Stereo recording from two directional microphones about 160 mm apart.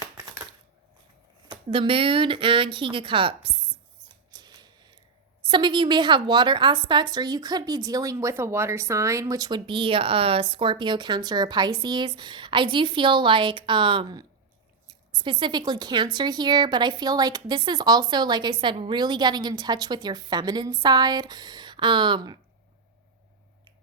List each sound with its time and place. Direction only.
1.5 s speech: 35° right (ahead or behind)
4.3 s a sound: 25° right (ahead or behind)
5.4 s a woman's voice: 30° right (ahead or behind)